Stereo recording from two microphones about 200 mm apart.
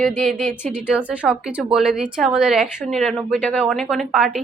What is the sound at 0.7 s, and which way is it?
A woman's voice, 5° right (ahead or behind).